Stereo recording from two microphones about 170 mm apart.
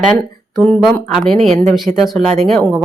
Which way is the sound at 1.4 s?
35° right (ahead or behind).